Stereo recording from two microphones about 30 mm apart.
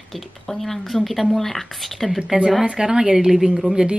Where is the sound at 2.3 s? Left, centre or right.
Centre.